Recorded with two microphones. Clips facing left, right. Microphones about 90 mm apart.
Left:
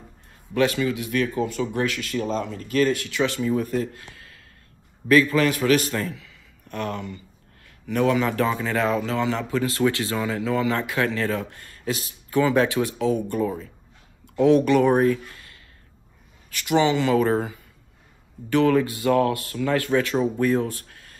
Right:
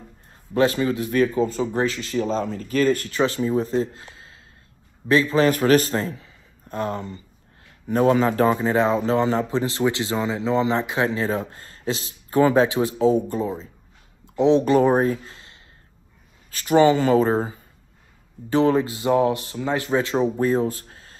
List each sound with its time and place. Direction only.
0.6 s a man's voice: 35° right (ahead or behind)
5.5 s a man's voice: 40° right (ahead or behind)